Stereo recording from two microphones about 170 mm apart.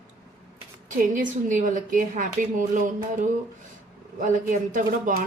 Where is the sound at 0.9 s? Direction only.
50° right (ahead or behind).